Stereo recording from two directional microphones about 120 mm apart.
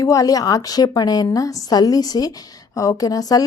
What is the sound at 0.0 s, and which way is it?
Speech, 30° left (ahead or behind).